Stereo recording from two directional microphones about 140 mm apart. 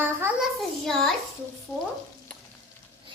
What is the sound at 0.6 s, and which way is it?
Speech, 5° left (ahead or behind).